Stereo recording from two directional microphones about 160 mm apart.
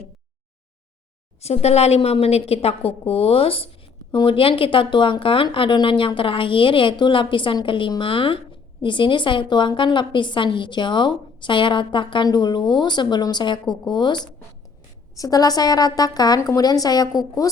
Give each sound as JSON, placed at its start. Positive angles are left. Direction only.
{"t": 1.4, "sound": "a woman's voice", "side_deg": 40}